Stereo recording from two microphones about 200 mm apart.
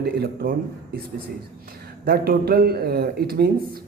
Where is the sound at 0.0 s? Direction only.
50° right (ahead or behind).